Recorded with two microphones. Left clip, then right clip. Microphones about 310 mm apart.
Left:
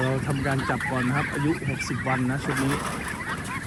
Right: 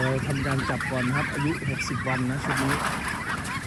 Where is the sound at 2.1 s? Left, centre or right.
Centre.